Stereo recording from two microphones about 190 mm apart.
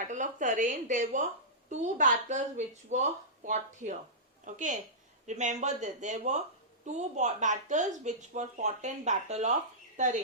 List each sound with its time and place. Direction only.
0.1 s speech: 40° right (ahead or behind)